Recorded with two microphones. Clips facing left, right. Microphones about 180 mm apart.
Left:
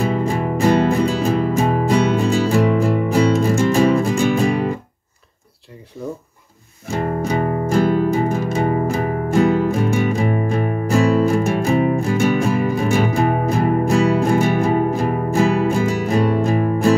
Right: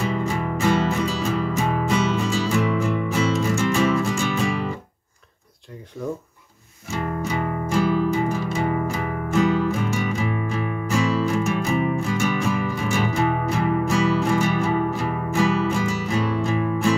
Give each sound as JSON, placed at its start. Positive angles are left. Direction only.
{"t": 0.0, "sound": "music", "side_deg": 40}
{"t": 2.8, "sound": "music", "side_deg": 40}
{"t": 6.0, "sound": "a sound", "side_deg": 5}
{"t": 6.9, "sound": "music", "side_deg": 45}
{"t": 12.2, "sound": "music", "side_deg": 50}